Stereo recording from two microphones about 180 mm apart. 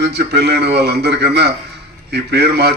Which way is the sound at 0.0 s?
65° right (ahead or behind).